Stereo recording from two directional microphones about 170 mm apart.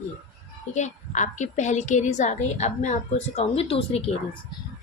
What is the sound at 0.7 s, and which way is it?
A woman's voice, 45° left (ahead or behind).